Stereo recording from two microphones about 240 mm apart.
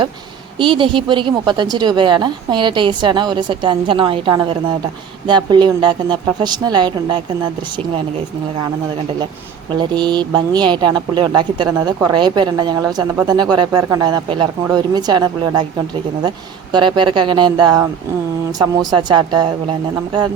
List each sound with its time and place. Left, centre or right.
0.6 s a woman's voice: right
9.7 s a woman's voice: centre
16.7 s a woman's voice: centre